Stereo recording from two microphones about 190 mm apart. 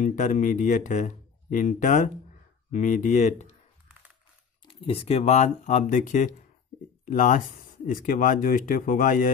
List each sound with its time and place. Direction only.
0.0 s speech: 40° left (ahead or behind)
4.6 s speech: 30° left (ahead or behind)